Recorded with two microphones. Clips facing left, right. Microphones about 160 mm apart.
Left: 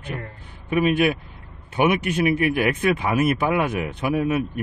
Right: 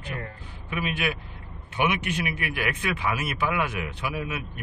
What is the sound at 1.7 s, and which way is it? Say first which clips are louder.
Speech: left 6 dB; 40° left (ahead or behind).